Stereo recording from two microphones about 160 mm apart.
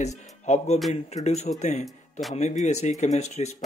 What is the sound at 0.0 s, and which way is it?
Speech, 45° left (ahead or behind).